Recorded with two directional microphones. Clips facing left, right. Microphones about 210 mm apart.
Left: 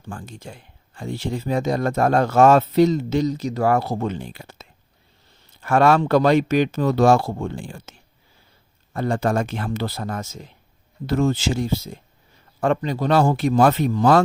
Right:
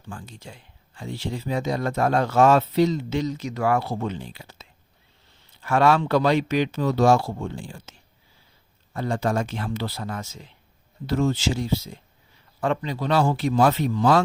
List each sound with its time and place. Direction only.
0.1 s speech: 50° left (ahead or behind)